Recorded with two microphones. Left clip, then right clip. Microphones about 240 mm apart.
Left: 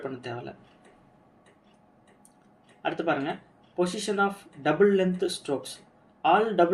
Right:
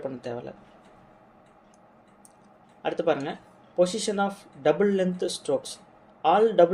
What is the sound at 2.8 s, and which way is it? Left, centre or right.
Speech, right.